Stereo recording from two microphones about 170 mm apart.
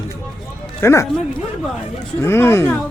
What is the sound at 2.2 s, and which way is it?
Speech, 15° left (ahead or behind).